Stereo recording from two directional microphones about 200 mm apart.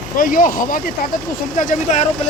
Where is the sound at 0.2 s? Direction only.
40° left (ahead or behind).